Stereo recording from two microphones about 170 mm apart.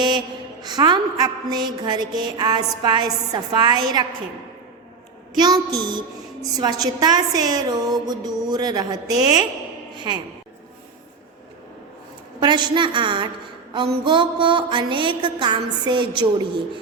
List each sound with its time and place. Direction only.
0.6 s a woman's voice: 25° right (ahead or behind)
5.3 s a woman's voice: 25° right (ahead or behind)
12.4 s a woman's voice: 25° right (ahead or behind)